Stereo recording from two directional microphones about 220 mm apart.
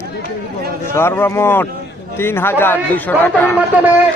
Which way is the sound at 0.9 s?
10° left (ahead or behind).